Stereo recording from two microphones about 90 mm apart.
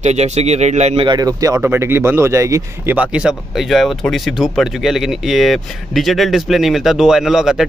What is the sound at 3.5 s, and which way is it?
Speech, centre (ahead or behind).